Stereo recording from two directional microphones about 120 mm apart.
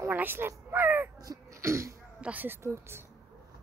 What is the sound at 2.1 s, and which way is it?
Speech, 10° right (ahead or behind).